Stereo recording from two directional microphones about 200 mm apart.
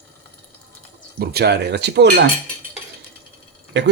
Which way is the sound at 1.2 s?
55° right (ahead or behind).